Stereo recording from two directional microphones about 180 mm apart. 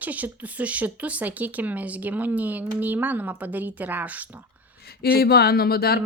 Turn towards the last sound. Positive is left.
turn(degrees=60)  # may be behind; listen again after turning